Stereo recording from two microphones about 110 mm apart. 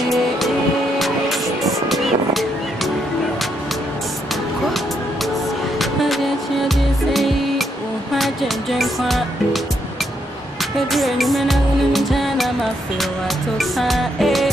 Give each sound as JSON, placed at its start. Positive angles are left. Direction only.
{"t": 0.9, "sound": "music", "side_deg": 0}
{"t": 5.8, "sound": "music", "side_deg": 0}
{"t": 10.9, "sound": "music", "side_deg": 0}
{"t": 13.6, "sound": "music", "side_deg": 0}